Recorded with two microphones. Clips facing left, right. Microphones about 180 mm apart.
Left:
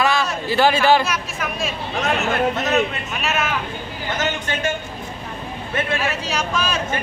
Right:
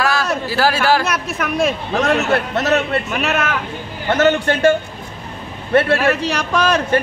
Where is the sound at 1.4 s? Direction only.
70° right (ahead or behind).